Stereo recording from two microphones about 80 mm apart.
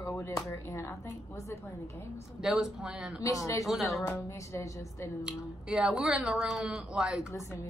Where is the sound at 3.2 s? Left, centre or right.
Left.